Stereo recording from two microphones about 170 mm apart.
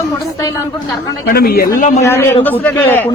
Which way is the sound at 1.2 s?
65° left (ahead or behind).